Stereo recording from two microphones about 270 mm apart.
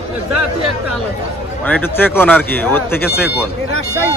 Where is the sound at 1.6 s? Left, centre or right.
Centre.